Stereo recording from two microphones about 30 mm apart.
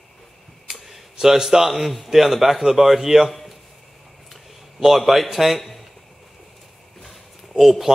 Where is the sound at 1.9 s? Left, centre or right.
Centre.